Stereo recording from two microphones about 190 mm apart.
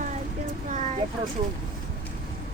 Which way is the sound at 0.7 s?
40° right (ahead or behind).